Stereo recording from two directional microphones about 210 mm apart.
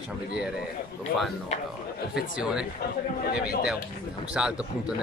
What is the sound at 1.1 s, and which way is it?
Speech, 45° left (ahead or behind).